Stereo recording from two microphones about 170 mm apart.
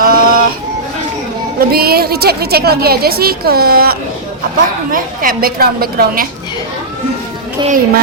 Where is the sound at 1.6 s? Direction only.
65° right (ahead or behind).